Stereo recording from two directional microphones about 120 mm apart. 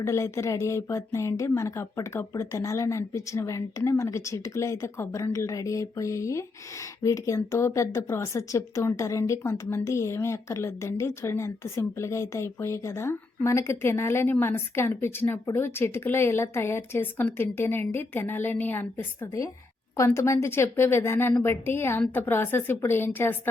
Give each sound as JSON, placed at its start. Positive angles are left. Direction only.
{"t": 0.0, "sound": "speech", "side_deg": 25}